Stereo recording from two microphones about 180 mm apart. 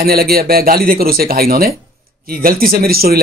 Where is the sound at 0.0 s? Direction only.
60° right (ahead or behind).